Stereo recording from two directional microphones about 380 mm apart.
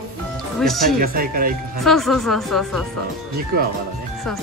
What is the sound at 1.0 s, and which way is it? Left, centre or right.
Speech, right.